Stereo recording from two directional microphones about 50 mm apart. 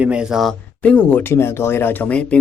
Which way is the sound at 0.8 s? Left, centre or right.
Left.